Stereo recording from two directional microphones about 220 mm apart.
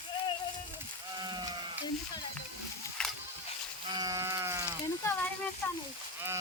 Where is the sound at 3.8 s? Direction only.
15° right (ahead or behind).